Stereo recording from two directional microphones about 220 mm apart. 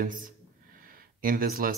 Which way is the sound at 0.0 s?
40° right (ahead or behind).